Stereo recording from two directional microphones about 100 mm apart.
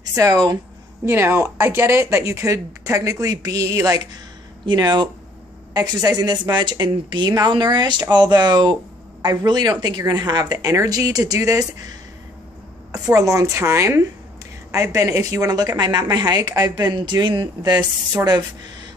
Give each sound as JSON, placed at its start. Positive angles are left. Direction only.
{"t": 0.0, "sound": "speech", "side_deg": -35}
{"t": 1.0, "sound": "a woman's voice", "side_deg": -25}